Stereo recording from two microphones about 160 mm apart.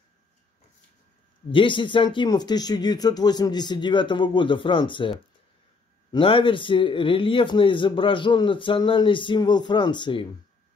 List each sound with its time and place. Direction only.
1.5 s speech: 30° left (ahead or behind)
6.1 s a man's voice: 30° left (ahead or behind)